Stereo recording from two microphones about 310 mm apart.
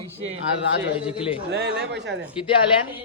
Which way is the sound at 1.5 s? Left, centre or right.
Right.